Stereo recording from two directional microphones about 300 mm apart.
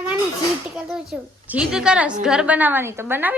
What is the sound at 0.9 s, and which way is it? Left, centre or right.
A woman's voice, centre.